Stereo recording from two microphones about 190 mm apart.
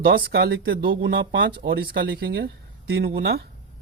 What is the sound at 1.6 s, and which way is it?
Speech, 55° right (ahead or behind).